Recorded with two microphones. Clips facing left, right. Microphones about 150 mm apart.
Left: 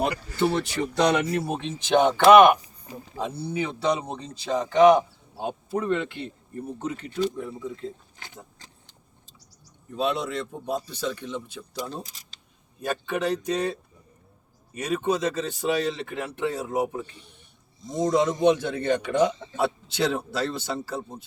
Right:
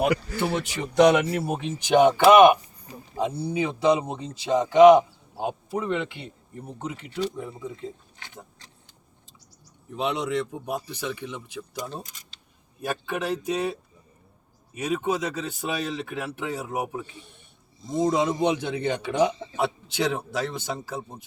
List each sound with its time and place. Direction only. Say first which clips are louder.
0.3 s speech: left 3 dB; 15° right (ahead or behind)
10.0 s speech: even; 20° right (ahead or behind)
12.1 s speech: right 1 dB; 30° left (ahead or behind)
12.8 s speech: left 2 dB; 5° right (ahead or behind)
18.3 s speech: left 3 dB; 15° right (ahead or behind)